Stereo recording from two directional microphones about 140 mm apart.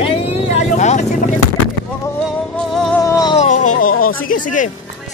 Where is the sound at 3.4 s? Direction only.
65° left (ahead or behind).